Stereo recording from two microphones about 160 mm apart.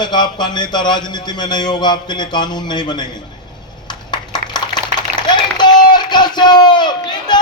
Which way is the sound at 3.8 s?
30° left (ahead or behind).